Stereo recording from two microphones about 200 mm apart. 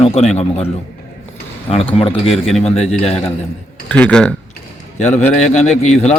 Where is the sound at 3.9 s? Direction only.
5° left (ahead or behind).